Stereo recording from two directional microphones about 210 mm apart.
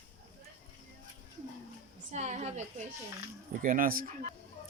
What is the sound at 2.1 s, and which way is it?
Speech, 35° right (ahead or behind).